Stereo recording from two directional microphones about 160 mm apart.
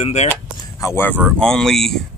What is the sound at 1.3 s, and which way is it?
Speech, 5° left (ahead or behind).